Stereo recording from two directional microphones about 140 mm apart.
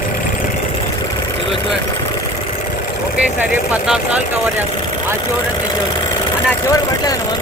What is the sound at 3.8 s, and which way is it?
Speech, 5° right (ahead or behind).